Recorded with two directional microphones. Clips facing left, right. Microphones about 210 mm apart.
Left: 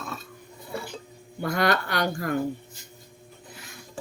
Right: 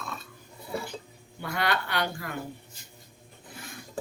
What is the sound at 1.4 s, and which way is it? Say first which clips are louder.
Speech: left 5 dB; 45° left (ahead or behind).